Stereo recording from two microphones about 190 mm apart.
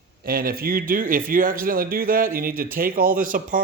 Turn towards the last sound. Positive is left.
turn(degrees=-45)  # may be behind; listen again after turning